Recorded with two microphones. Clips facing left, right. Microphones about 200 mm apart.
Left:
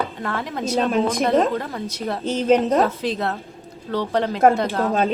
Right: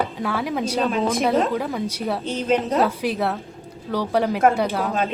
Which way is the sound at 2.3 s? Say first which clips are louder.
Left 5 dB; 40° left (ahead or behind).